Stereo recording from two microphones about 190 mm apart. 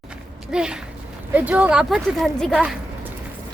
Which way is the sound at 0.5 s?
5° right (ahead or behind).